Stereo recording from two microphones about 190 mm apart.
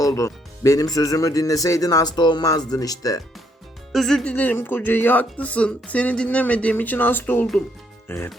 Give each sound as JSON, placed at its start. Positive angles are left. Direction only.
{"t": 0.0, "sound": "speech", "side_deg": 15}
{"t": 3.9, "sound": "speech", "side_deg": 0}